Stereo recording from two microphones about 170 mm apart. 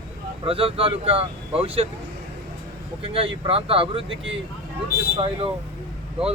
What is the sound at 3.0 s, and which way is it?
Speech, 30° right (ahead or behind).